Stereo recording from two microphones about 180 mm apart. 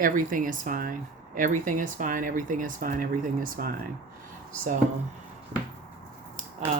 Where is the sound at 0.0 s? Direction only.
50° right (ahead or behind).